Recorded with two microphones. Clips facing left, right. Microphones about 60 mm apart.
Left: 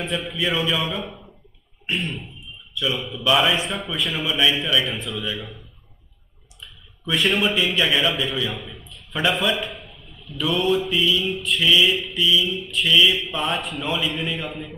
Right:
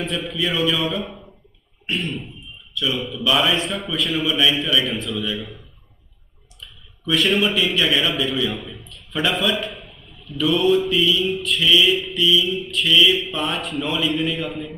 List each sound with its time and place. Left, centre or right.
0.0 s speech: centre
4.3 s a man's voice: centre
7.1 s a man's voice: centre